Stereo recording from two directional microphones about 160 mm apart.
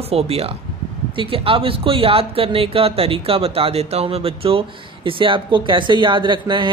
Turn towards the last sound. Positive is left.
turn(degrees=-30)  # may be behind; listen again after turning